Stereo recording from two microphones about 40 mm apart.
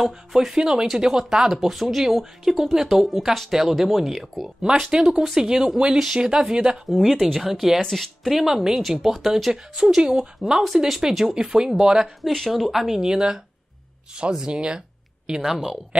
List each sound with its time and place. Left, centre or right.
0.0 s speech: centre
4.6 s speech: centre
6.9 s speech: centre
12.3 s speech: centre
12.5 s speech: centre
15.5 s speech: centre